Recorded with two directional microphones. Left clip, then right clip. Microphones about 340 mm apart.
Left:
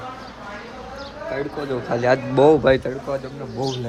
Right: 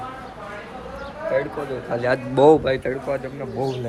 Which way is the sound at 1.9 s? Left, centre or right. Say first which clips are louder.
Left 3 dB; centre.